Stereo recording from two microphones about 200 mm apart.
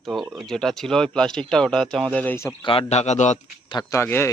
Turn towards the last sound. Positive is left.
turn(degrees=10)  # may be behind; listen again after turning